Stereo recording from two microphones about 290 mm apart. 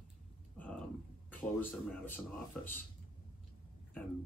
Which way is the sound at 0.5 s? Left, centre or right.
Centre.